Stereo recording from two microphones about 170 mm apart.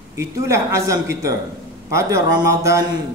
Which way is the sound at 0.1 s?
15° right (ahead or behind).